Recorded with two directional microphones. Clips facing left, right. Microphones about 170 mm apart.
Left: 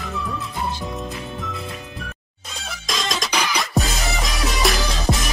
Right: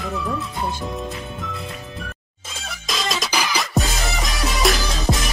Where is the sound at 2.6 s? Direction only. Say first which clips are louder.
Right 1 dB; centre (ahead or behind).